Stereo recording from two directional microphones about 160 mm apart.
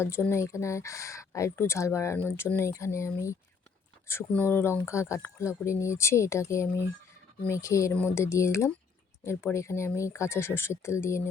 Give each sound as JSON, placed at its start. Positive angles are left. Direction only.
{"t": 0.0, "sound": "speech", "side_deg": 15}